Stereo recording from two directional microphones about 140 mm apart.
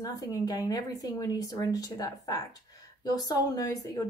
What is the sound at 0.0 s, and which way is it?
Speech, 25° left (ahead or behind).